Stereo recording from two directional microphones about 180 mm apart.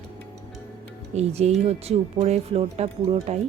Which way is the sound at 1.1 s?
35° right (ahead or behind).